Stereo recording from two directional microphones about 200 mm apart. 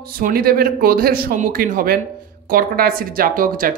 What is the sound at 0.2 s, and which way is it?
A woman's voice, 50° right (ahead or behind).